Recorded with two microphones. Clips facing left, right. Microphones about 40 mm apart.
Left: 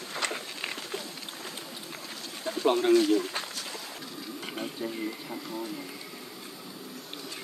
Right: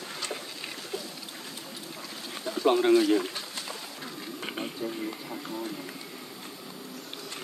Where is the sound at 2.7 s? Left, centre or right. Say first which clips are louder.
Right 1 dB; centre.